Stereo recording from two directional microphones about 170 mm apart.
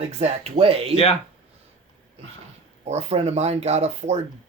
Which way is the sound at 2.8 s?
40° right (ahead or behind).